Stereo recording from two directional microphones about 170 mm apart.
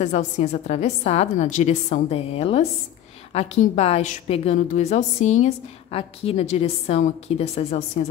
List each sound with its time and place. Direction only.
0.0 s a woman's voice: 40° left (ahead or behind)